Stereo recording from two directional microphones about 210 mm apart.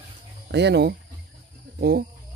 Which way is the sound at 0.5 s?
55° right (ahead or behind).